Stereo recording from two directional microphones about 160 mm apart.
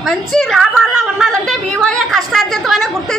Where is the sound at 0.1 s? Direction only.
Centre (ahead or behind).